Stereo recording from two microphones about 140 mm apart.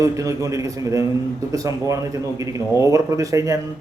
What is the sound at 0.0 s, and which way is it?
A man's voice, 20° right (ahead or behind).